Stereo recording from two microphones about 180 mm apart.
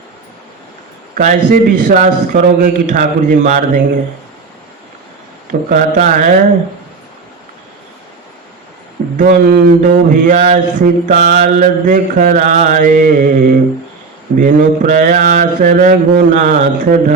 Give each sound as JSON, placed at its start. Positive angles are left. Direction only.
{"t": 1.1, "sound": "mantra", "side_deg": -45}
{"t": 5.5, "sound": "mantra", "side_deg": -45}
{"t": 9.1, "sound": "mantra", "side_deg": -50}